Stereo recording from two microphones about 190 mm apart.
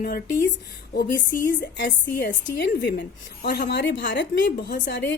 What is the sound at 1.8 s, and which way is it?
A woman's voice, 60° left (ahead or behind).